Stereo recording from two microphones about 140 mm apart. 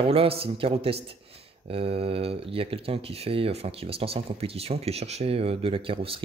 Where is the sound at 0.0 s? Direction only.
45° right (ahead or behind).